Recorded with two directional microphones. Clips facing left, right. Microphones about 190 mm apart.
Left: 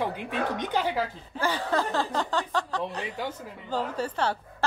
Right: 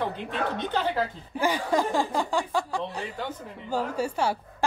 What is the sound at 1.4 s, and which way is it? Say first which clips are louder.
A woman's voice: right 2 dB; 15° right (ahead or behind).